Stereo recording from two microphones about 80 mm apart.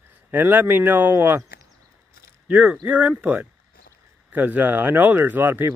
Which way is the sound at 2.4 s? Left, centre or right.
Centre.